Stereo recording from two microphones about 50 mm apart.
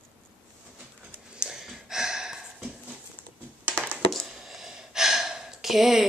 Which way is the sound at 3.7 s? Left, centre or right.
Right.